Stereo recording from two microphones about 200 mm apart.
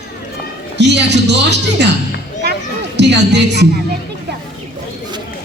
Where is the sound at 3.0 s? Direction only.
60° right (ahead or behind).